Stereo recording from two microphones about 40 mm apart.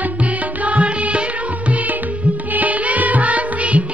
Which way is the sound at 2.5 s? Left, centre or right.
Right.